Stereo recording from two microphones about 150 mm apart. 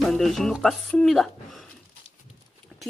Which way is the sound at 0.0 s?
Centre (ahead or behind).